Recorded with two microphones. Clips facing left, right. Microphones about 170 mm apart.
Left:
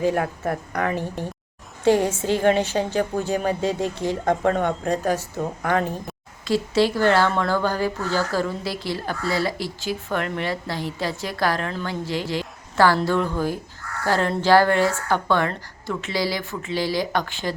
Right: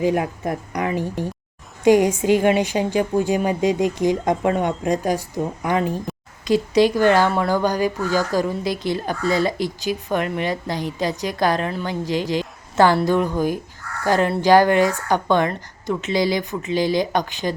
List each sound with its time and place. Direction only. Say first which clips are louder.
0.0 s speech: right 2 dB; 15° right (ahead or behind)